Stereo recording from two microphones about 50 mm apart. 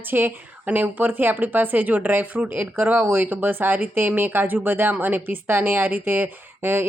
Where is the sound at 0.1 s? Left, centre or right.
Right.